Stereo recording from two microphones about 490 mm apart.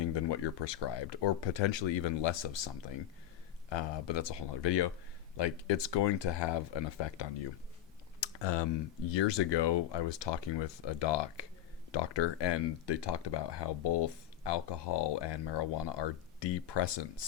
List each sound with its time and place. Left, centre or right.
0.0 s speech: left
3.7 s speech: left
8.2 s typing: left
9.1 s speech: left